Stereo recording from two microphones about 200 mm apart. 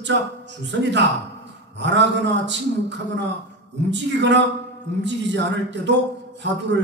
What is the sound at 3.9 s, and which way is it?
A man's voice, 60° right (ahead or behind).